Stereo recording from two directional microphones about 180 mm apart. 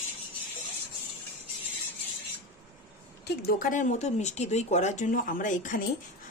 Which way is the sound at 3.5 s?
50° left (ahead or behind).